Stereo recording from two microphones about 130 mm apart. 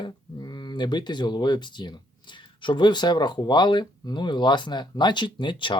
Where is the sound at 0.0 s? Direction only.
35° left (ahead or behind).